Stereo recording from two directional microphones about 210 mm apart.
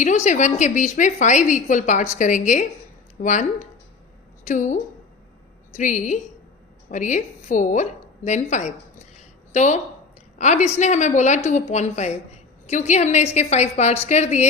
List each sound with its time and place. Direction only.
0.0 s a woman's voice: 35° left (ahead or behind)
9.1 s a sound: 35° left (ahead or behind)
10.3 s a woman's voice: 35° left (ahead or behind)